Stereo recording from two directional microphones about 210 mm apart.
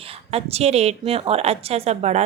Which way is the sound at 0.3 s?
30° right (ahead or behind).